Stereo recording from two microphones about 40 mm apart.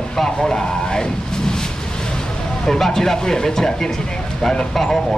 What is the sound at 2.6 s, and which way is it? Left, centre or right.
Speech, centre.